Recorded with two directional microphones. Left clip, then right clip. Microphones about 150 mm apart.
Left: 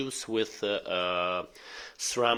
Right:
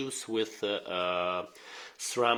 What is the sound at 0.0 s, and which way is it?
Speech, 30° left (ahead or behind).